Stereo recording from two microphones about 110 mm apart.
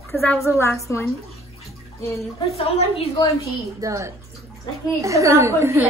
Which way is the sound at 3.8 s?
30° right (ahead or behind).